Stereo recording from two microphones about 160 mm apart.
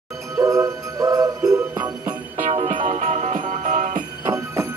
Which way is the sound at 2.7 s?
55° right (ahead or behind).